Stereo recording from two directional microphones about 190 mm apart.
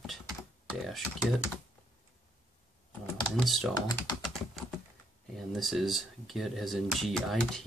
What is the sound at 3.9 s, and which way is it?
Speech, 20° left (ahead or behind).